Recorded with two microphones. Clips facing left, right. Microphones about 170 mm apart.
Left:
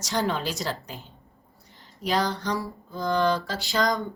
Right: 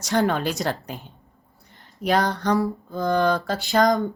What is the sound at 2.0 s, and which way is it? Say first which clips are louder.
A woman's voice: right 5 dB; 55° right (ahead or behind).